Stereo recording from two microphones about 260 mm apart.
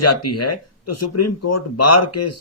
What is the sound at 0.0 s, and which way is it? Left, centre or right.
Speech, left.